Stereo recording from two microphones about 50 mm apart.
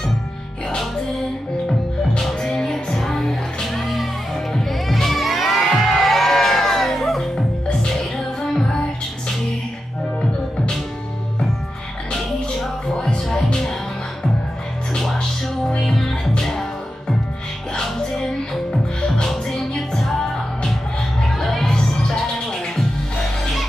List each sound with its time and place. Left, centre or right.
2.4 s music: centre
4.6 s crowd: centre
12.9 s music: centre
15.0 s music: centre
18.7 s music: centre